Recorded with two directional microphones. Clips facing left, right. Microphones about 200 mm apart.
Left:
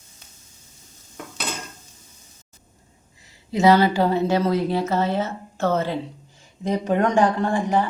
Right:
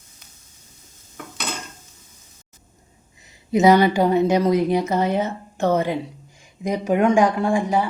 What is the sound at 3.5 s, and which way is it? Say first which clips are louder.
Speech: right 2 dB; 20° right (ahead or behind).